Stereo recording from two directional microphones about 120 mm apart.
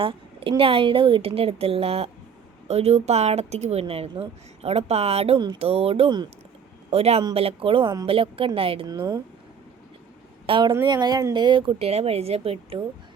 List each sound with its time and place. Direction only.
0.0 s a woman's voice: 45° right (ahead or behind)
8.9 s speech: 30° right (ahead or behind)
10.4 s a woman's voice: 45° right (ahead or behind)